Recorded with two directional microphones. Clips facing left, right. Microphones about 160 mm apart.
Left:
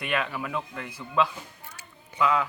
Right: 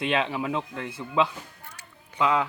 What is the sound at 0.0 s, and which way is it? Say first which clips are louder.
Speech: right 4 dB; 20° right (ahead or behind).